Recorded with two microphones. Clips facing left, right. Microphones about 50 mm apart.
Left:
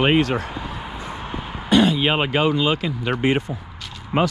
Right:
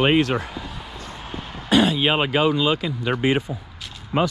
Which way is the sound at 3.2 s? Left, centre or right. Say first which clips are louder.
Left 1 dB; left.